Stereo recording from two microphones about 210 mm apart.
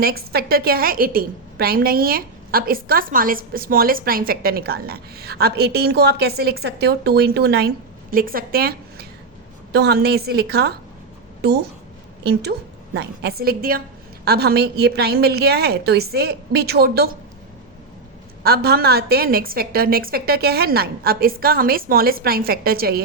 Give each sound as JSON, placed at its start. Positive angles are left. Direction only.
{"t": 0.0, "sound": "a woman's voice", "side_deg": -45}
{"t": 12.2, "sound": "a woman's voice", "side_deg": -50}
{"t": 18.4, "sound": "a woman's voice", "side_deg": -50}